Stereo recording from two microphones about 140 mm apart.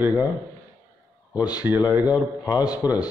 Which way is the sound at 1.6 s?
10° right (ahead or behind).